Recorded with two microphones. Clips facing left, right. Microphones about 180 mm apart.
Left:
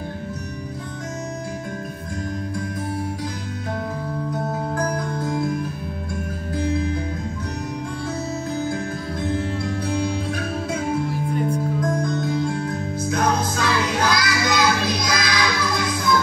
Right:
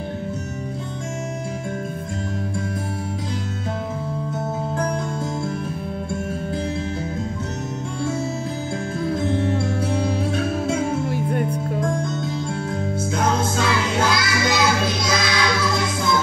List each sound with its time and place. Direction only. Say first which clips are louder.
4.7 s music: right 1 dB; 25° right (ahead or behind)
9.2 s music: even; 25° right (ahead or behind)